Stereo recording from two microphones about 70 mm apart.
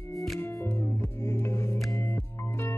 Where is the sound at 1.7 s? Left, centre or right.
Centre.